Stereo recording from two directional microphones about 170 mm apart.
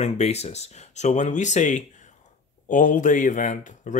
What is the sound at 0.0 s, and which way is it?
Speech, 40° left (ahead or behind).